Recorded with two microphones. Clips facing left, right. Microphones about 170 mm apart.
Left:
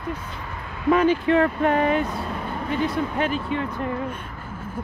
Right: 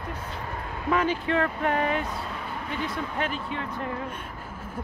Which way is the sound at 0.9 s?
20° left (ahead or behind).